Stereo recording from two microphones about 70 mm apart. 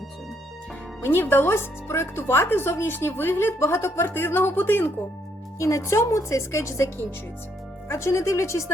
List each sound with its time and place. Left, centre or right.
1.0 s speech: left
5.5 s speech: left